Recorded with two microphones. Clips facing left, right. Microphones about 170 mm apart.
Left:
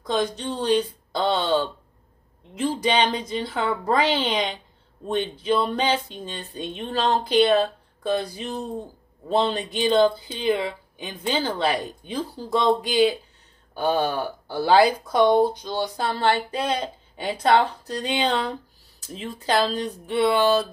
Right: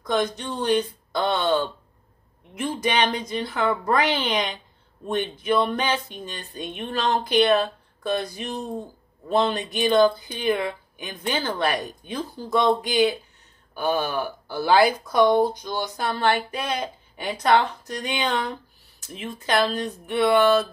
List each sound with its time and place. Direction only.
0.0 s speech: 30° left (ahead or behind)